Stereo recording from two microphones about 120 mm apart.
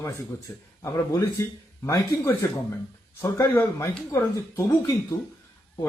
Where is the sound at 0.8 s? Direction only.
25° left (ahead or behind).